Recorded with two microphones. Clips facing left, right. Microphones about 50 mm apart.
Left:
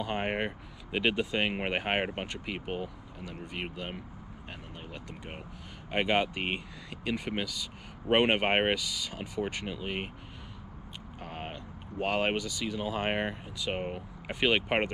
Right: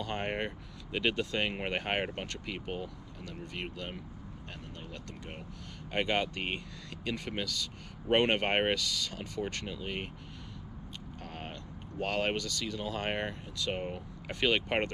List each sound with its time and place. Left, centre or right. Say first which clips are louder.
0.0 s speech: left 3 dB; centre
11.1 s speech: left 4 dB; centre